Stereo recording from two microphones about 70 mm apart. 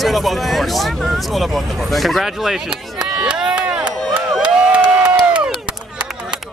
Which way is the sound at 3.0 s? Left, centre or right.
Centre.